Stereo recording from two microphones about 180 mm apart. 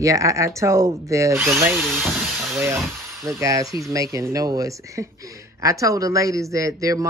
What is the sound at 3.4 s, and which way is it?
Speech, 20° right (ahead or behind).